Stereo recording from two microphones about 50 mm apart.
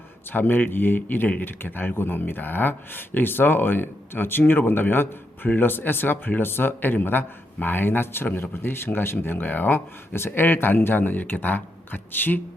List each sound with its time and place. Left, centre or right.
0.3 s speech: left